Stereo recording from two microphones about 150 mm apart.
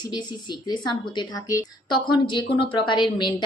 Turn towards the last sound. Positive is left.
turn(degrees=30)  # may be behind; listen again after turning